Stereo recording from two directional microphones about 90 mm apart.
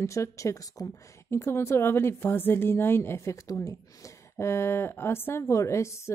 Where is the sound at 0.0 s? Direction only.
35° left (ahead or behind).